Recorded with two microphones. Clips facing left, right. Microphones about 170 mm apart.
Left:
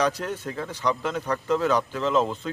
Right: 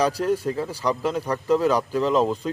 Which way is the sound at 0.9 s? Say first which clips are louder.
Right 2 dB; 35° right (ahead or behind).